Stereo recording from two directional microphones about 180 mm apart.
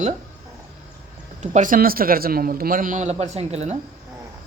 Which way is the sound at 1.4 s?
45° right (ahead or behind).